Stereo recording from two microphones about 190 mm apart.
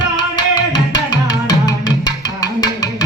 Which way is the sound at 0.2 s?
20° left (ahead or behind).